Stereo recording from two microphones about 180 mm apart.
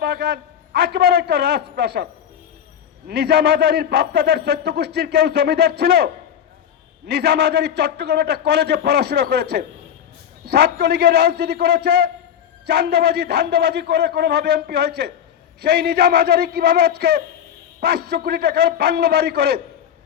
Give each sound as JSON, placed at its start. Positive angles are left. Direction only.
{"t": 0.0, "sound": "a man's voice", "side_deg": -65}
{"t": 3.1, "sound": "a man's voice", "side_deg": -65}
{"t": 7.1, "sound": "a man's voice", "side_deg": -65}